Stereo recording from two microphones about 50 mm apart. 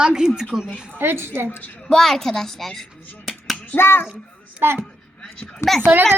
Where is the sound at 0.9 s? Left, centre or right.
Right.